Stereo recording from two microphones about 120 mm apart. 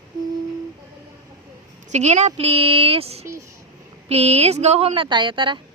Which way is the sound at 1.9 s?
70° right (ahead or behind).